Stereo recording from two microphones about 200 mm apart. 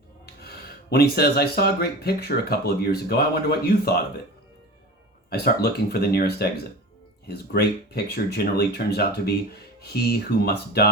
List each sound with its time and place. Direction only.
0.4 s speech: 50° left (ahead or behind)
5.3 s speech: 50° left (ahead or behind)